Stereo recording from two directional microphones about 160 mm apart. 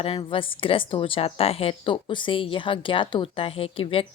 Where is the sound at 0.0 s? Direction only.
35° left (ahead or behind).